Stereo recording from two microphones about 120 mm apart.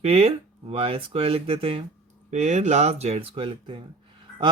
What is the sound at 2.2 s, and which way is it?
Speech, 75° right (ahead or behind).